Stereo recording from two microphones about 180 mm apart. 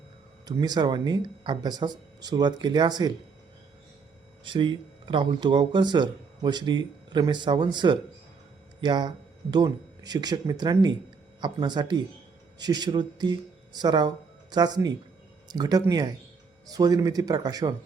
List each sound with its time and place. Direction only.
0.4 s speech: 25° right (ahead or behind)
4.4 s speech: 25° right (ahead or behind)